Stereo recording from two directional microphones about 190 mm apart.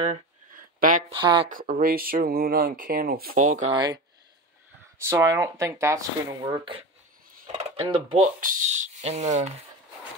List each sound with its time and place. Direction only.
0.0 s a sound: 35° right (ahead or behind)
0.7 s speech: 45° right (ahead or behind)
1.1 s speech: 25° right (ahead or behind)
1.5 s speech: 50° right (ahead or behind)
3.7 s speech: 20° right (ahead or behind)
5.1 s speech: 15° right (ahead or behind)
8.4 s speech: 40° right (ahead or behind)